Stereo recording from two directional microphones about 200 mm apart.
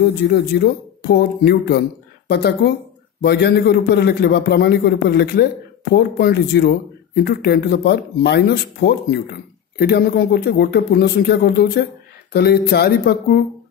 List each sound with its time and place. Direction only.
0.6 s a man's voice: 55° left (ahead or behind)